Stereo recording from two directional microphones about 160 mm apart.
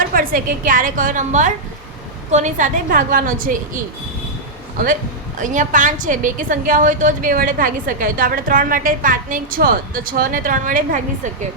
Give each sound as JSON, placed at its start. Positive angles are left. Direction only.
{"t": 0.1, "sound": "a woman's voice", "side_deg": -65}
{"t": 5.4, "sound": "a woman's voice", "side_deg": -50}